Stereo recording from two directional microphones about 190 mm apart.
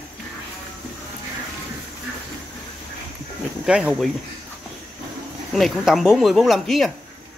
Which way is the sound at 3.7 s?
5° right (ahead or behind).